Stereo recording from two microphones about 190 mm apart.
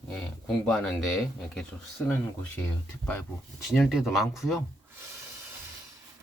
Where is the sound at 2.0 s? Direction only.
10° left (ahead or behind).